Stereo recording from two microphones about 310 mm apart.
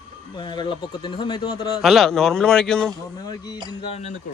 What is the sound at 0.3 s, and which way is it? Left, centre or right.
A man's voice, centre.